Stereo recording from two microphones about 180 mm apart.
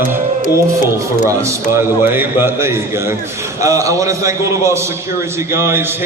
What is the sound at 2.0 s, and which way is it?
A man's voice, 10° right (ahead or behind).